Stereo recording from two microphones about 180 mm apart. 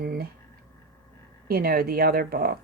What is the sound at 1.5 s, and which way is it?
A woman's voice, 55° right (ahead or behind).